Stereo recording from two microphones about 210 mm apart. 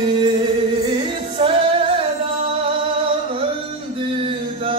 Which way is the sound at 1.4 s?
25° right (ahead or behind).